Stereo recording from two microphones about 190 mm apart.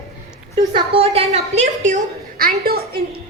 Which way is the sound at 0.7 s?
30° right (ahead or behind).